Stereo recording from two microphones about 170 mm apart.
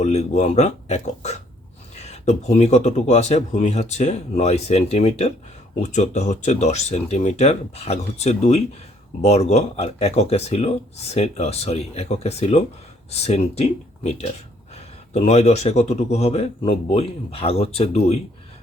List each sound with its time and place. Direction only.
0.0 s speech: 40° left (ahead or behind)